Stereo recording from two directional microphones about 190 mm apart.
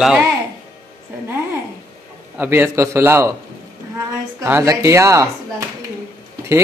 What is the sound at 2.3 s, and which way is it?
A man's voice, 10° right (ahead or behind).